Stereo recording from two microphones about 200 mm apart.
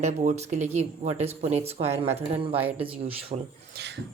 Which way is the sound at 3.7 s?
55° right (ahead or behind).